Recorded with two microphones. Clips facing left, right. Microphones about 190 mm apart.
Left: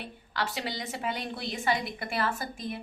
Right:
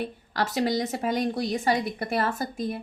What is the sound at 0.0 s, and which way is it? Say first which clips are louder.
A woman's voice: right 6 dB; 45° right (ahead or behind).